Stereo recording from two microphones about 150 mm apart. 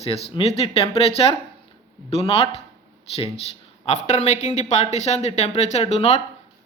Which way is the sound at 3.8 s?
50° left (ahead or behind).